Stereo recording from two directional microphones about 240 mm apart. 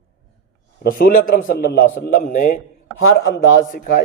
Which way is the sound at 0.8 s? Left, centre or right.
Left.